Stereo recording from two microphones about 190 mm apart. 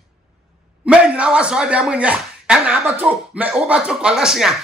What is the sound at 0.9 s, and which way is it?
Speech, 5° right (ahead or behind).